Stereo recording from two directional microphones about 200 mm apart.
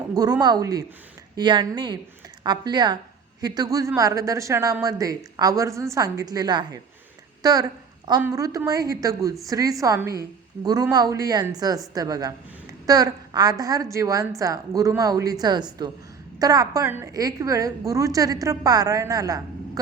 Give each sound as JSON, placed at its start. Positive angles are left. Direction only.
{"t": 0.1, "sound": "a woman's voice", "side_deg": -20}